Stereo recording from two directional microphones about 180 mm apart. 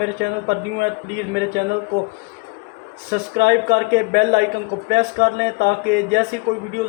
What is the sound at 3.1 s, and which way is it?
Speech, 65° right (ahead or behind).